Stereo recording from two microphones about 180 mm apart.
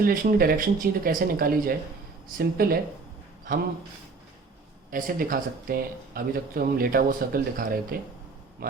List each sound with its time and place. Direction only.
0.0 s speech: 50° right (ahead or behind)
4.9 s speech: 50° right (ahead or behind)